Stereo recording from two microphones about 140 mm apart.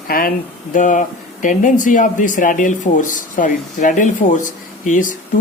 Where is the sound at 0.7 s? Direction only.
65° left (ahead or behind).